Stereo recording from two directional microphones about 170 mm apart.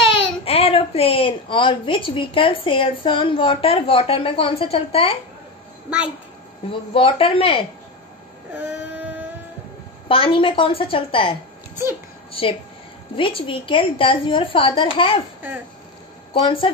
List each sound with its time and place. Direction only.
0.5 s a woman's voice: 35° left (ahead or behind)
5.9 s a child's voice: 10° right (ahead or behind)
6.7 s a woman's voice: 30° left (ahead or behind)
8.9 s music: 10° right (ahead or behind)
10.0 s a woman's voice: 30° left (ahead or behind)
16.3 s a woman's voice: 30° left (ahead or behind)